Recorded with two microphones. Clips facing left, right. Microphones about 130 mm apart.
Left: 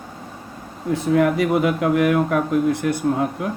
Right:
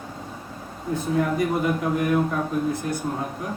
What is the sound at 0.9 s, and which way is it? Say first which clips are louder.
Speech: left 6 dB; 75° left (ahead or behind).